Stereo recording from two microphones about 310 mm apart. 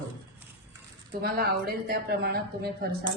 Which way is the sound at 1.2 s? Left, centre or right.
Right.